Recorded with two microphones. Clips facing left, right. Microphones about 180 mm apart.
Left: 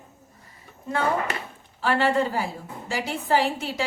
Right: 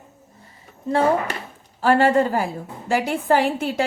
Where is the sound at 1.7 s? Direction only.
45° right (ahead or behind).